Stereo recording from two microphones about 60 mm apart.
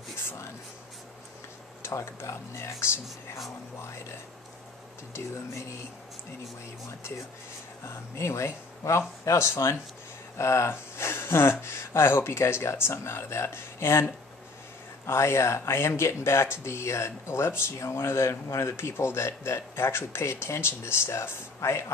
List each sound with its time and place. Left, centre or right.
1.8 s a sound: left
2.1 s speech: left
5.1 s speech: left
7.8 s speech: left